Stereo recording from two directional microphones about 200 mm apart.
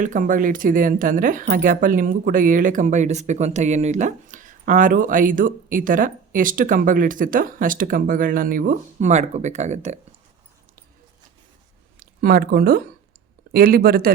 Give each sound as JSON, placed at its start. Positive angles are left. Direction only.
{"t": 0.0, "sound": "speech", "side_deg": -40}
{"t": 11.9, "sound": "speech", "side_deg": -45}